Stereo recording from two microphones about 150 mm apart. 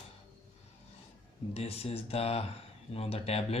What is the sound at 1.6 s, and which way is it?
Speech, 40° left (ahead or behind).